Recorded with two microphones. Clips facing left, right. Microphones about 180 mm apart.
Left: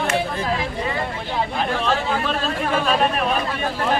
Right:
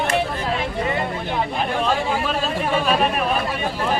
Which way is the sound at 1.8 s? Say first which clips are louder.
Even; 10° right (ahead or behind).